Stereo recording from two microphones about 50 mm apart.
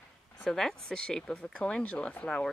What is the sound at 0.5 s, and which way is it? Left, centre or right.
Speech, centre.